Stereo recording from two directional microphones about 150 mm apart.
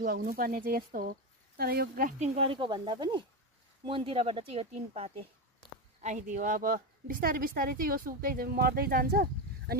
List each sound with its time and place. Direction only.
0.0 s a woman's voice: 80° right
1.6 s speech: 85° right
2.1 s speech: 45° right (ahead or behind)
5.9 s a woman's voice: 55° right (ahead or behind); by 9.8 s 90° right